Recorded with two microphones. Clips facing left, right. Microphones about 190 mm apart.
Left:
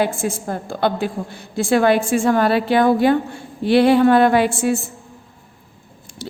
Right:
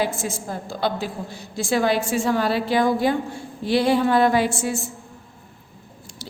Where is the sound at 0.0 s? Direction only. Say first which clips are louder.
Left 4 dB; 55° left (ahead or behind).